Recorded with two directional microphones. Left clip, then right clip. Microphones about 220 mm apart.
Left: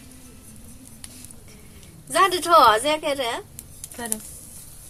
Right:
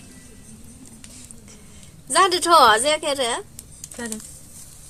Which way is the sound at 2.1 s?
35° right (ahead or behind).